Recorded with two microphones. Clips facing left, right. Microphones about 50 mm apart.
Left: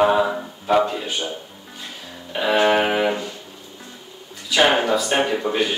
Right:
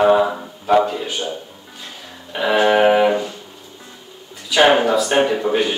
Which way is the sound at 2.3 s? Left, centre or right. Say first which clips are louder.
Right 3 dB; centre.